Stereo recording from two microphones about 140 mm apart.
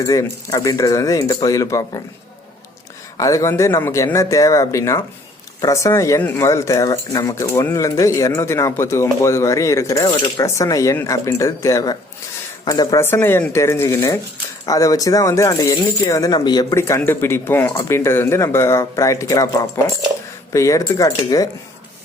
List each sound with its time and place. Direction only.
0.0 s speech: 20° left (ahead or behind)
3.2 s speech: 25° left (ahead or behind)
10.4 s speech: 20° left (ahead or behind)
16.7 s speech: 20° left (ahead or behind)